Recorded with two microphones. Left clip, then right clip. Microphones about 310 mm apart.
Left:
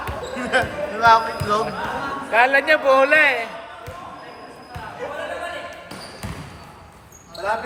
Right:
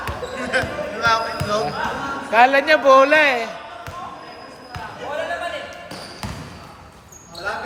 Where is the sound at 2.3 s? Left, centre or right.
Right.